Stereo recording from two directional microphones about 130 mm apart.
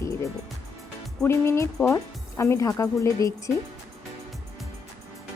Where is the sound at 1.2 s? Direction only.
20° left (ahead or behind).